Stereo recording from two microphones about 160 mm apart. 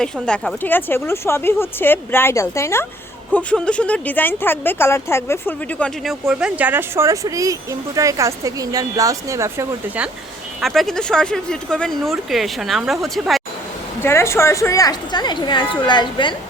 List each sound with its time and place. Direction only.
0.0 s speech: 5° left (ahead or behind)
3.3 s speech: 5° left (ahead or behind)
6.1 s speech: 5° right (ahead or behind)
10.6 s speech: centre (ahead or behind)
14.0 s a woman's voice: 15° left (ahead or behind)